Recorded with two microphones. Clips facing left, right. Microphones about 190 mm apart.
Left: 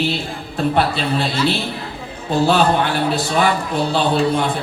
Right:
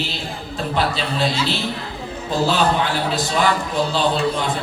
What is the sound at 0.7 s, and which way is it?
A man's voice, 60° left (ahead or behind).